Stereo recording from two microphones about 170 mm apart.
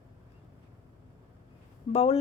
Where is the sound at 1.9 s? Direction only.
35° left (ahead or behind).